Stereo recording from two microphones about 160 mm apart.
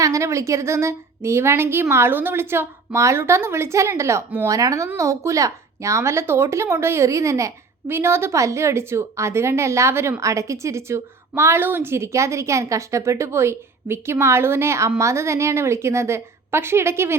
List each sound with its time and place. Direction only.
0.0 s speech: 20° right (ahead or behind)